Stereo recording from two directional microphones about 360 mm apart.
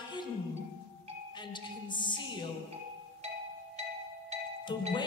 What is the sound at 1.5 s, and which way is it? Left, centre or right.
Music, centre.